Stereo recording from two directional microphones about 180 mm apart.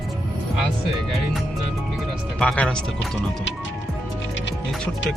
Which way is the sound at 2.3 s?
5° left (ahead or behind).